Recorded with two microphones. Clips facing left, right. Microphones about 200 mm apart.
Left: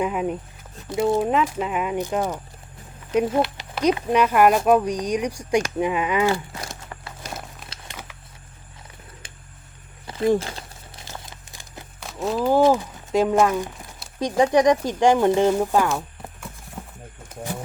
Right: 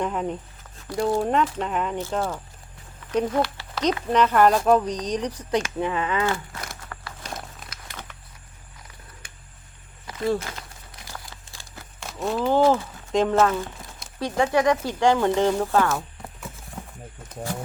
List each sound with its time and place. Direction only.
0.0 s speech: 10° left (ahead or behind)
6.6 s a sound: 25° left (ahead or behind)
7.2 s a sound: 5° left (ahead or behind)
10.3 s crumpling: 30° left (ahead or behind)
12.0 s speech: centre (ahead or behind)
17.2 s wild animals: 10° left (ahead or behind)